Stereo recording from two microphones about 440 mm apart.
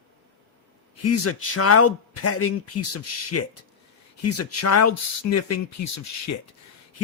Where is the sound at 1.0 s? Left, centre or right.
Left.